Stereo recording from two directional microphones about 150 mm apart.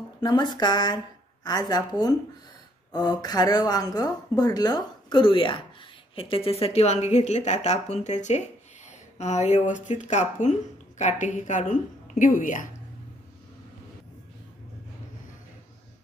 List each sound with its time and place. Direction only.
0.2 s a woman's voice: 30° left (ahead or behind); by 12.6 s 60° left (ahead or behind)